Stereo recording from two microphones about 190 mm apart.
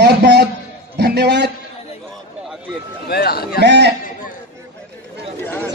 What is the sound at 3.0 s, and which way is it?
Chatter, 55° left (ahead or behind).